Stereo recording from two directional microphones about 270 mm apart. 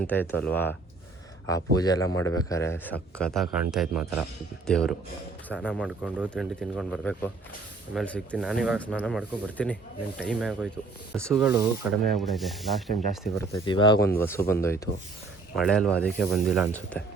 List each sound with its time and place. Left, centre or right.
0.0 s speech: centre
2.0 s a man's voice: left
2.5 s a man's voice: centre
13.5 s a man's voice: centre